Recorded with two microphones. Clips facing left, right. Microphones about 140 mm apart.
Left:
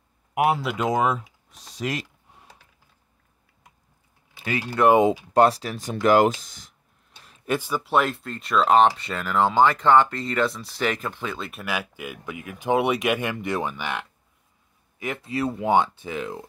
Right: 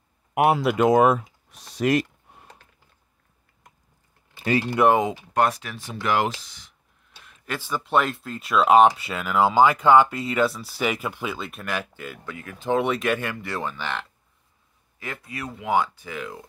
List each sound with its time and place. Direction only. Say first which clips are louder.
0.3 s speech: right 3 dB; 60° right (ahead or behind)
4.8 s speech: left 1 dB; 5° right (ahead or behind)
5.3 s speech: left 4 dB; 30° left (ahead or behind)
7.4 s speech: left 4 dB; 15° left (ahead or behind)
15.0 s speech: left 7 dB; 25° left (ahead or behind)